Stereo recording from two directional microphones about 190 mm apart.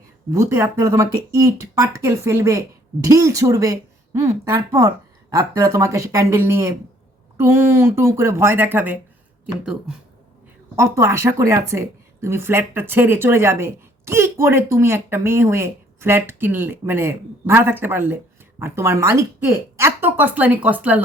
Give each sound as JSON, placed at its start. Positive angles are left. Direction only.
{"t": 0.3, "sound": "speech", "side_deg": -15}
{"t": 10.8, "sound": "speech", "side_deg": -15}